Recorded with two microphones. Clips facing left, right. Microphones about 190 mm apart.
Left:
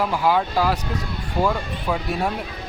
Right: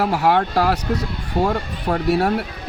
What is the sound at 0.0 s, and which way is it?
Speech, 70° right (ahead or behind).